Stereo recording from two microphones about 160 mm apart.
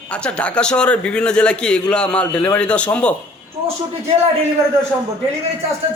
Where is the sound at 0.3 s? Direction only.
10° left (ahead or behind).